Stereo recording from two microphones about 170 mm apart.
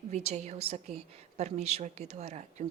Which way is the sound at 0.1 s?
40° right (ahead or behind).